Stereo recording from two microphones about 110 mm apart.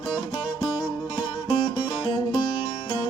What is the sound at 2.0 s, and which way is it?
Music, 40° left (ahead or behind).